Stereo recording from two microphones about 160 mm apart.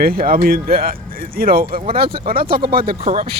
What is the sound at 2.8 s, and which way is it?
Speech, 40° right (ahead or behind).